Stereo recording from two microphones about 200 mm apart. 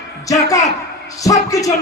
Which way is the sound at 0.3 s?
15° left (ahead or behind).